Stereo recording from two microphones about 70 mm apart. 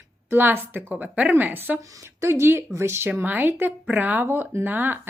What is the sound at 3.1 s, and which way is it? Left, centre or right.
Speech, right.